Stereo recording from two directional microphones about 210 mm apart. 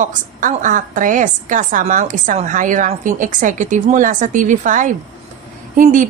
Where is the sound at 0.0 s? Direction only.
35° right (ahead or behind).